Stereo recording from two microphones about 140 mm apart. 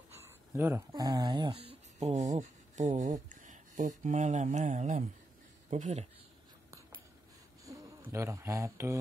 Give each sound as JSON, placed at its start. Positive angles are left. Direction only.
{"t": 0.2, "sound": "a sound", "side_deg": -15}
{"t": 0.9, "sound": "speech", "side_deg": -25}
{"t": 1.5, "sound": "speech", "side_deg": -45}
{"t": 5.7, "sound": "speech", "side_deg": -55}
{"t": 7.7, "sound": "a sound", "side_deg": -25}
{"t": 8.1, "sound": "speech", "side_deg": -20}